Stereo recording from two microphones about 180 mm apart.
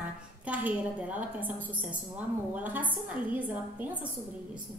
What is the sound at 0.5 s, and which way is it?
A woman's voice, 10° right (ahead or behind).